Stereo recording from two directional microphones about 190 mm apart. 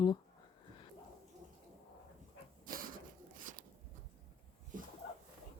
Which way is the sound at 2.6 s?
45° right (ahead or behind).